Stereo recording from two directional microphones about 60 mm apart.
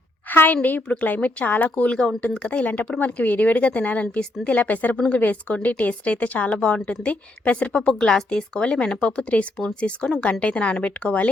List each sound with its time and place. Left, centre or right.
0.3 s a woman's voice: left